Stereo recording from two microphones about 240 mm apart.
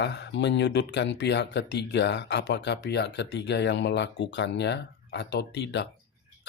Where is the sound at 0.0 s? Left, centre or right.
Left.